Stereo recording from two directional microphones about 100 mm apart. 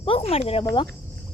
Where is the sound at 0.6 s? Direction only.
50° left (ahead or behind).